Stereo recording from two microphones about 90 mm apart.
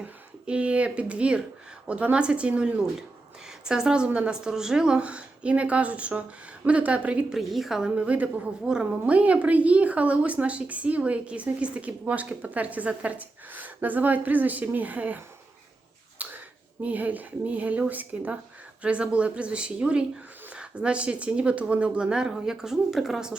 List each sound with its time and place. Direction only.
0.0 s a woman's voice: 10° right (ahead or behind)
16.2 s a sound: 15° right (ahead or behind)
16.8 s a woman's voice: 20° right (ahead or behind)